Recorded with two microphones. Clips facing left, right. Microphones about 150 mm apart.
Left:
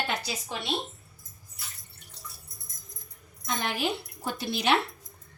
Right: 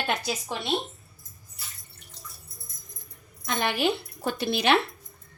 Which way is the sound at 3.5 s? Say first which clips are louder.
Right 4 dB; 70° right (ahead or behind).